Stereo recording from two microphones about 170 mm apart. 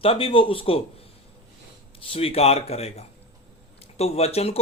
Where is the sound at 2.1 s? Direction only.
35° left (ahead or behind).